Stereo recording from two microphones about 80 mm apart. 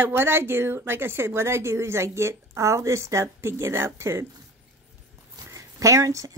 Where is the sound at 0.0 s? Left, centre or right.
Right.